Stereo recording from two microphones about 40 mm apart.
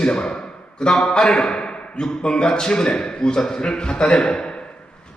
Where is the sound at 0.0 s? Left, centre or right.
Left.